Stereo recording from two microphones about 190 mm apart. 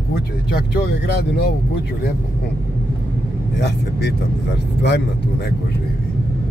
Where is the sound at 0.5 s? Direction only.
60° left (ahead or behind).